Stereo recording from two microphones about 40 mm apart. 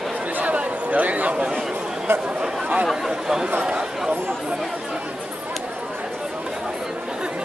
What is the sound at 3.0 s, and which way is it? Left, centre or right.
Speech, centre.